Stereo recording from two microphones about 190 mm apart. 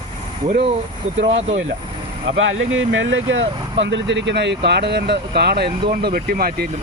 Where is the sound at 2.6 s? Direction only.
90° right; by 6.7 s 50° right (ahead or behind).